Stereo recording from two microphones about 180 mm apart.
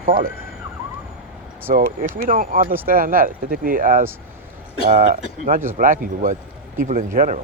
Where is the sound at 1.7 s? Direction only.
50° right (ahead or behind).